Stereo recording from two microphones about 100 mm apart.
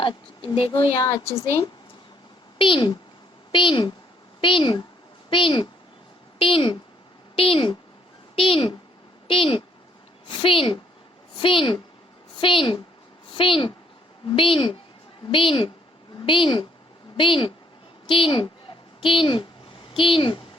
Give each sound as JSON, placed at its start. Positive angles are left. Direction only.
{"t": 0.0, "sound": "a woman's voice", "side_deg": 55}
{"t": 0.9, "sound": "a woman's voice", "side_deg": 30}
{"t": 1.4, "sound": "speech", "side_deg": 70}
{"t": 2.6, "sound": "a woman's voice", "side_deg": 60}